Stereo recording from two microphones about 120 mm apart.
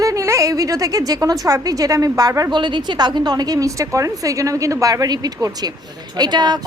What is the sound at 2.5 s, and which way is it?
A woman's voice, 40° right (ahead or behind).